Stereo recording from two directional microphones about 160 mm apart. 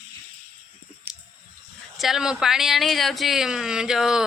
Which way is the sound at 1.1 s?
10° right (ahead or behind).